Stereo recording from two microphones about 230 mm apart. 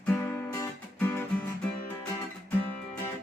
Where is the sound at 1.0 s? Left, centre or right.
Centre.